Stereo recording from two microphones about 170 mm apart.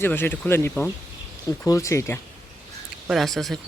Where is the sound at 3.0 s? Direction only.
Centre (ahead or behind).